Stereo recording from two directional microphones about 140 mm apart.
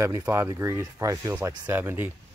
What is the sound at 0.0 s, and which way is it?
Speech, 20° right (ahead or behind).